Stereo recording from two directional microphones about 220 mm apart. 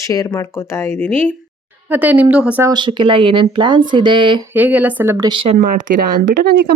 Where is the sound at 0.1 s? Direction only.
15° left (ahead or behind).